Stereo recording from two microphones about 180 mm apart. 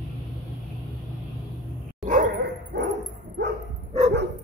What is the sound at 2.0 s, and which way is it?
Dog, 45° right (ahead or behind).